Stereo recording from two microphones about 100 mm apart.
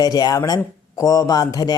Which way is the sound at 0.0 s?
40° left (ahead or behind).